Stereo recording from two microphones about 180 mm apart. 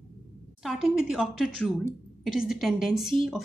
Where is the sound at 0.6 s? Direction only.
Centre (ahead or behind).